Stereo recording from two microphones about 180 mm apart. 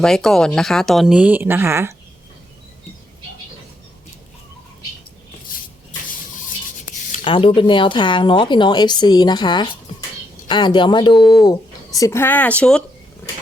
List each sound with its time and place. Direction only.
0.0 s speech: centre (ahead or behind); by 2.0 s 15° right (ahead or behind)
7.3 s speech: 30° left (ahead or behind)
11.2 s speech: centre (ahead or behind)
11.4 s speech: 20° left (ahead or behind)